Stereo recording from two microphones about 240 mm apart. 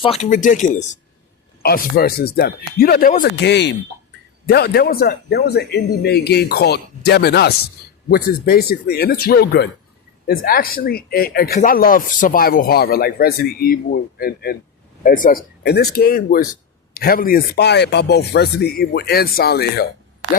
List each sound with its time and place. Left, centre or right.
0.0 s speech: left